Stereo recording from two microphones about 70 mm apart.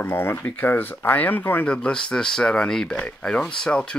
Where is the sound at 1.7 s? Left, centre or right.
Centre.